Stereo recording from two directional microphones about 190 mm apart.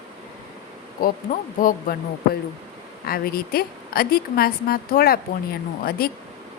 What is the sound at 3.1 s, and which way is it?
A woman's voice, 50° left (ahead or behind).